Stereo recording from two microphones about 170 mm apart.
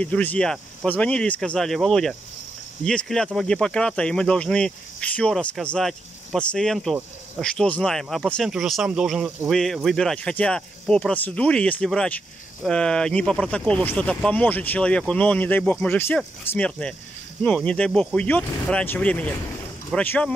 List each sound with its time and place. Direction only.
0.0 s speech: 10° left (ahead or behind)